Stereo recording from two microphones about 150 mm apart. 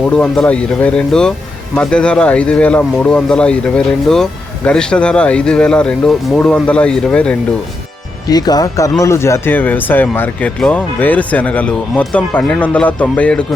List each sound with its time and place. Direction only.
0.0 s speech: 5° left (ahead or behind)
8.3 s speech: 25° left (ahead or behind); by 13.4 s 10° left (ahead or behind)